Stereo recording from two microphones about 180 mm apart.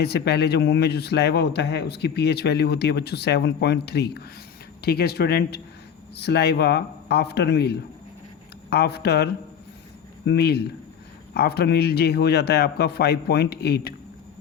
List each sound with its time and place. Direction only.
0.0 s a man's voice: 65° left (ahead or behind)